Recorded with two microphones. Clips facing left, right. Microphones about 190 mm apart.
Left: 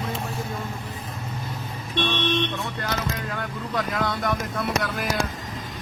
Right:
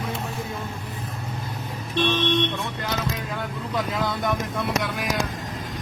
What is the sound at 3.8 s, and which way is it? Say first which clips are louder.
Speech: even; centre (ahead or behind).